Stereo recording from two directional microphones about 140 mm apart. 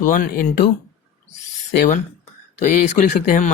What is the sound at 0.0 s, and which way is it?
Speech, 75° left (ahead or behind).